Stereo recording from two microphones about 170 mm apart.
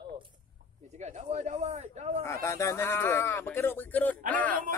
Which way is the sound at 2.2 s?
15° left (ahead or behind).